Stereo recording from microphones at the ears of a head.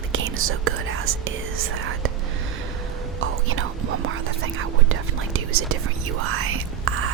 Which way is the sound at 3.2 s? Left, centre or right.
Right.